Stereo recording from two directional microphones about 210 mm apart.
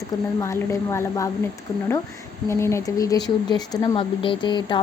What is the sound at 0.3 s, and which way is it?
Speech, 15° left (ahead or behind).